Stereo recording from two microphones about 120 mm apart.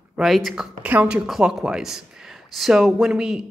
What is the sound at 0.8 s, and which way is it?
Speech, 10° right (ahead or behind).